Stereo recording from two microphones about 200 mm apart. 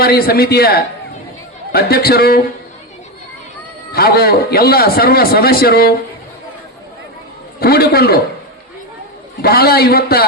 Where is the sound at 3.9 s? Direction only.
50° left (ahead or behind).